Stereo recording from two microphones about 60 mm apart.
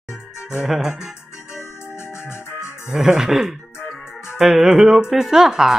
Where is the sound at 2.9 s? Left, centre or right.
Centre.